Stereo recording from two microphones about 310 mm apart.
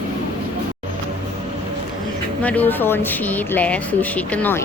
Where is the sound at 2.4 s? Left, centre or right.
Centre.